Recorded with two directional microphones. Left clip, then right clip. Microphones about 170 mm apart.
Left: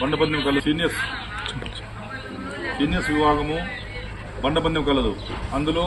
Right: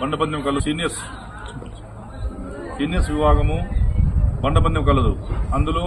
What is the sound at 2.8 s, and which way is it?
Speech, 40° right (ahead or behind).